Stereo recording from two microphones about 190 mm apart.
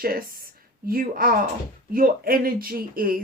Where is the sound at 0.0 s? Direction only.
50° right (ahead or behind).